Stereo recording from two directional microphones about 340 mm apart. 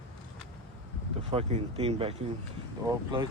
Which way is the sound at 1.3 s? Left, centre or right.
Centre.